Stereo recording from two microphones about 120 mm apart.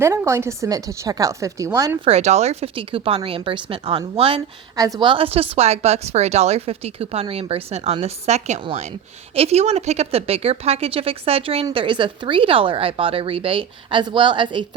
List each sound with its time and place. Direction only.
0.0 s a woman's voice: 25° right (ahead or behind)
2.0 s a woman's voice: 65° right (ahead or behind)
2.7 s a woman's voice: 50° right (ahead or behind)
4.8 s a woman's voice: 30° right (ahead or behind)
5.0 s a woman's voice: 50° right (ahead or behind)
8.0 s a woman's voice: 70° right (ahead or behind); by 14.6 s 40° right (ahead or behind)